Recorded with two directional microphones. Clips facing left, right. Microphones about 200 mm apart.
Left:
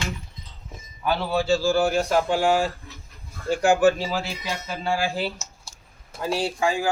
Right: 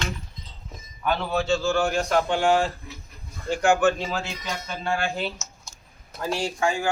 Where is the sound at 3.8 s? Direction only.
5° left (ahead or behind).